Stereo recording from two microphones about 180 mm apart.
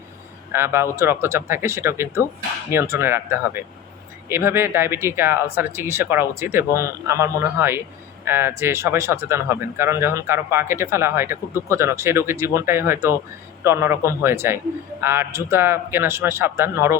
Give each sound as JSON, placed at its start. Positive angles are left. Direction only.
{"t": 0.5, "sound": "speech", "side_deg": -15}